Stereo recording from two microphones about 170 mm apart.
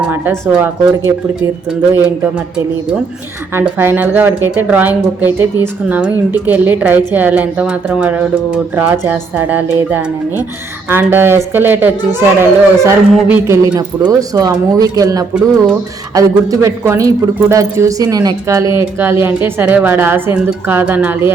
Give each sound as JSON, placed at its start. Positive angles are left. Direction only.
{"t": 0.1, "sound": "speech", "side_deg": -15}
{"t": 3.5, "sound": "speech", "side_deg": -15}